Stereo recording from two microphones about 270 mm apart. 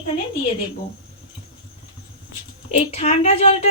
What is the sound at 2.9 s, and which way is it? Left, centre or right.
Speech, left.